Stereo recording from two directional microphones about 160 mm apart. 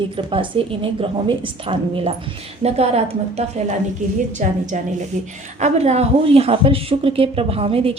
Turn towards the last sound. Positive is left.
turn(degrees=-35)  # may be behind; listen again after turning